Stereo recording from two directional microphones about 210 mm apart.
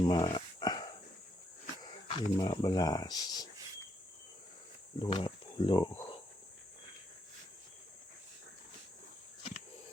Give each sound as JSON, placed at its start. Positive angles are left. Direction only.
{"t": 0.0, "sound": "a sound", "side_deg": 20}
{"t": 2.0, "sound": "speech", "side_deg": 25}
{"t": 4.9, "sound": "speech", "side_deg": 25}